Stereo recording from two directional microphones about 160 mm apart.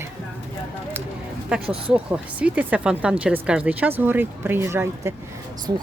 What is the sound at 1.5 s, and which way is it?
Speech, 5° right (ahead or behind).